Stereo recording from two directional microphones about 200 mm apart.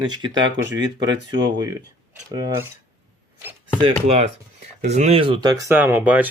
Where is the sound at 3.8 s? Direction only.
30° right (ahead or behind); by 6.3 s 10° right (ahead or behind).